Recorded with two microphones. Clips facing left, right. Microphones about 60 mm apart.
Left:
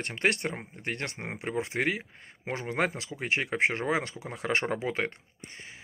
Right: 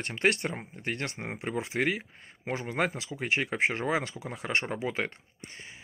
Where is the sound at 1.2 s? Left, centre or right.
Centre.